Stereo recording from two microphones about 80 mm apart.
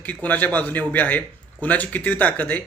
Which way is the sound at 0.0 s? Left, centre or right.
Centre.